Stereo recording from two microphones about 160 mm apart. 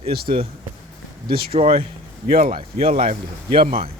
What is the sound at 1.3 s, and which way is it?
A man's voice, 70° right (ahead or behind).